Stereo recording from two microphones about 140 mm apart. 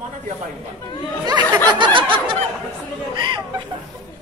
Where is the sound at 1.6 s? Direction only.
35° right (ahead or behind).